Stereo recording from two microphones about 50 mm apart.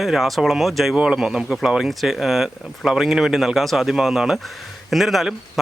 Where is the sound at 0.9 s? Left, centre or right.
Centre.